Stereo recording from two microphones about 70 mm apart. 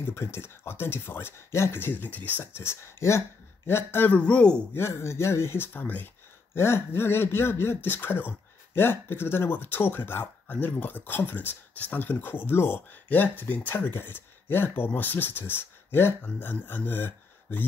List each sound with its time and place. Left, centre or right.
0.0 s speech: left
4.1 s speech: centre
4.7 s speech: left
6.5 s speech: left